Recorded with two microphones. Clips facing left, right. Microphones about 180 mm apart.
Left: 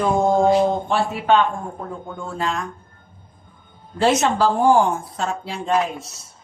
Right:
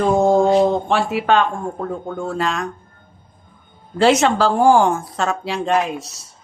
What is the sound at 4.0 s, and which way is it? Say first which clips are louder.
A woman's voice: right 3 dB; 85° right.